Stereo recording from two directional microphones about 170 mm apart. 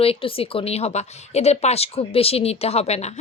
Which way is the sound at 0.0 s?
35° left (ahead or behind).